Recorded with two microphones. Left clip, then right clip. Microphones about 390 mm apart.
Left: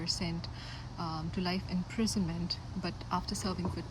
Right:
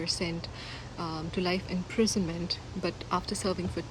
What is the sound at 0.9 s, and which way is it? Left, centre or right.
Speech, centre.